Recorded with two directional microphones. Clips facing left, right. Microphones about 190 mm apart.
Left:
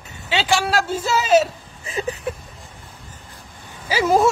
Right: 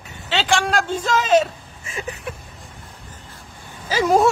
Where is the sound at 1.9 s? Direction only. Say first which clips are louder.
Left 5 dB; 35° left (ahead or behind).